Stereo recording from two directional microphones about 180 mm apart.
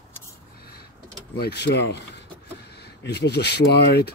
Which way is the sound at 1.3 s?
65° left (ahead or behind).